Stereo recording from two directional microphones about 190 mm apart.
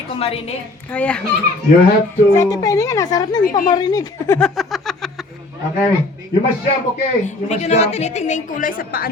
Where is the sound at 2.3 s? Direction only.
15° left (ahead or behind).